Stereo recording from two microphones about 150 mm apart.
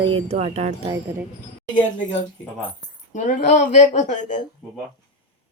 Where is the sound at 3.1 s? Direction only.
55° left (ahead or behind).